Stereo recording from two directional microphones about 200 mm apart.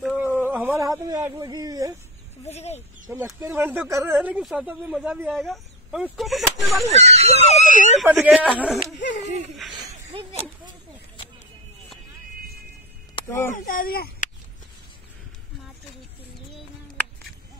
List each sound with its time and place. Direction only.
0.0 s a sound: 5° right (ahead or behind)
2.4 s speech: 35° left (ahead or behind)
3.1 s speech: 10° right (ahead or behind)
6.9 s speech: 35° right (ahead or behind)
7.4 s speech: 35° left (ahead or behind)
8.0 s speech: 5° right (ahead or behind)
8.7 s a sound: 60° left (ahead or behind)
13.7 s speech: 45° left (ahead or behind)